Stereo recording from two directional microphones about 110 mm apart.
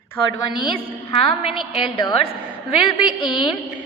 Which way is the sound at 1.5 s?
5° right (ahead or behind).